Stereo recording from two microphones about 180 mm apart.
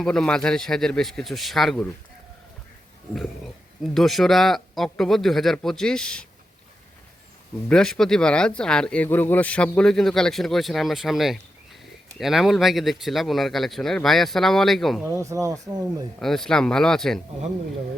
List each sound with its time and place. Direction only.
0.0 s speech: 5° left (ahead or behind)
3.9 s speech: centre (ahead or behind)
7.7 s speech: 5° left (ahead or behind)
15.0 s speech: 15° right (ahead or behind)
16.2 s speech: centre (ahead or behind)